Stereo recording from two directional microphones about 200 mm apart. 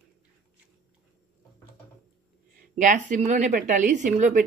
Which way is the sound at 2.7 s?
40° right (ahead or behind).